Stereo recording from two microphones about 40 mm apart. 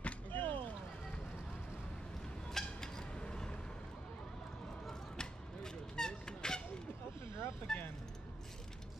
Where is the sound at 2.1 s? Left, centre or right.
Centre.